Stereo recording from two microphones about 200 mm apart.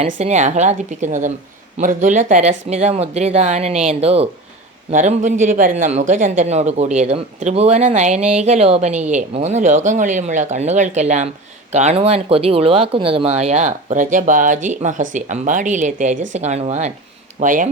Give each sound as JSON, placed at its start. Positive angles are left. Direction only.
{"t": 0.2, "sound": "speech", "side_deg": -35}